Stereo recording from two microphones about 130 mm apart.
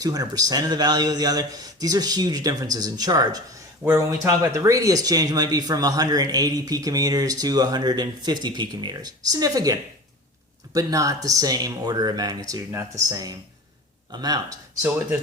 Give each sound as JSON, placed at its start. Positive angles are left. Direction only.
{"t": 0.0, "sound": "speech", "side_deg": -30}
{"t": 10.8, "sound": "speech", "side_deg": -25}